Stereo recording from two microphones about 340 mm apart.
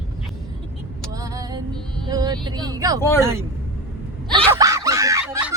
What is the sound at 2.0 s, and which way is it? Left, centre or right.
Speech, centre.